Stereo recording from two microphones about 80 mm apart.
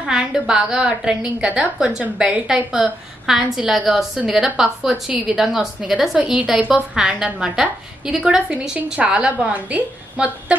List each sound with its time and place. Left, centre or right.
0.0 s a woman's voice: centre